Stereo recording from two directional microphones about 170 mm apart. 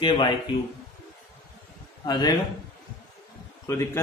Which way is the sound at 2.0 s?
25° left (ahead or behind).